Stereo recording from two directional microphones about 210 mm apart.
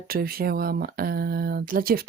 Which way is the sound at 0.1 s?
45° right (ahead or behind).